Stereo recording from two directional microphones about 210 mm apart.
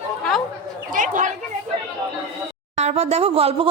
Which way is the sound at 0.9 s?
40° right (ahead or behind).